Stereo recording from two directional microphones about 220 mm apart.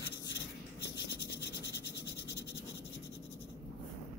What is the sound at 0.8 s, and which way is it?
Scratch, 50° left (ahead or behind).